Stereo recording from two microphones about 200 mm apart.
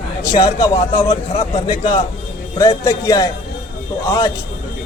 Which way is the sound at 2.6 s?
15° left (ahead or behind).